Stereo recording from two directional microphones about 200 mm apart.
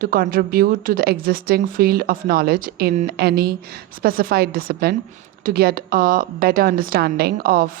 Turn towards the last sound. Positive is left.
turn(degrees=-45)  # may be behind; listen again after turning